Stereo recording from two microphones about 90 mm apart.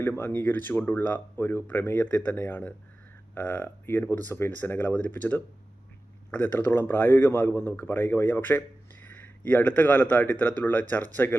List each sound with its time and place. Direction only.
0.0 s a man's voice: 20° left (ahead or behind)